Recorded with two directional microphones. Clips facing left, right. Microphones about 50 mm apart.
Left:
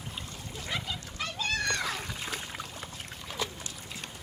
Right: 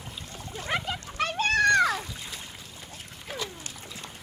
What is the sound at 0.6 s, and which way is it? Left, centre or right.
Splash, right.